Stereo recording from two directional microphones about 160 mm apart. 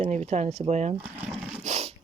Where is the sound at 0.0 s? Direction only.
45° right (ahead or behind).